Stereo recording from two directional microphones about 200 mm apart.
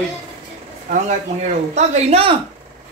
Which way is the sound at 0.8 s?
40° right (ahead or behind).